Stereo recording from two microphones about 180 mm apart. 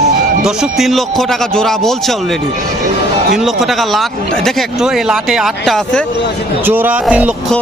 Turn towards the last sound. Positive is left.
turn(degrees=-5)  # may be behind; listen again after turning